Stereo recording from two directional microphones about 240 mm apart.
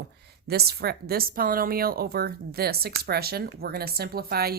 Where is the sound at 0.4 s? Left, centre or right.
Right.